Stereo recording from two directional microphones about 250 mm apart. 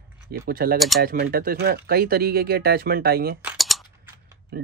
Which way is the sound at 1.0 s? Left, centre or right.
Right.